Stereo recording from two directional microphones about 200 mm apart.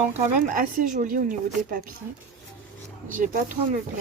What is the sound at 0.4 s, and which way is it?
Speech, 40° right (ahead or behind).